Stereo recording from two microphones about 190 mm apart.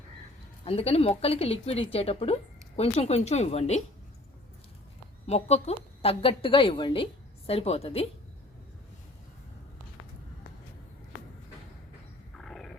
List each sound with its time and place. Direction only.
0.6 s speech: 30° left (ahead or behind)
5.2 s a woman's voice: 35° left (ahead or behind)
12.4 s a sound: 5° left (ahead or behind)